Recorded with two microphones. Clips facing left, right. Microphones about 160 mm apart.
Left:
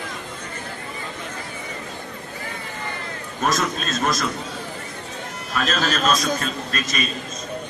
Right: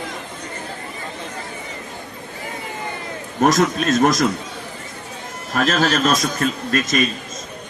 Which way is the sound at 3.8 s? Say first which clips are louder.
Right 8 dB; 65° right (ahead or behind).